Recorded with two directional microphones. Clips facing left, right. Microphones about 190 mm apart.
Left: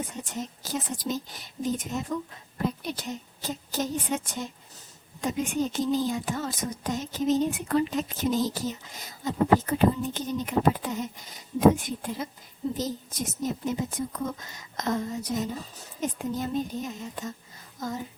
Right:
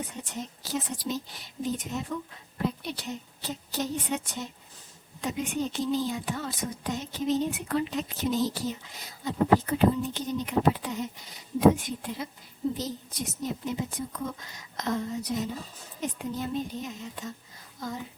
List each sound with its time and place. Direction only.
0.3 s a woman's voice: 45° left (ahead or behind)